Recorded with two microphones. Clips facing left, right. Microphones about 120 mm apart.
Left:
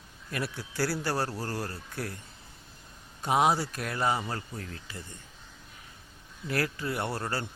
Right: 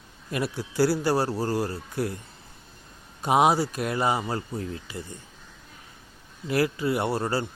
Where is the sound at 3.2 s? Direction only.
15° right (ahead or behind).